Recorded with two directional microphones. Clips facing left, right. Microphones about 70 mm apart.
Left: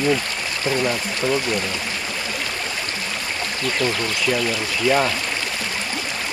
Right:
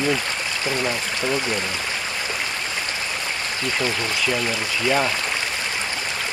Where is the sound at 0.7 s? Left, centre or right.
Centre.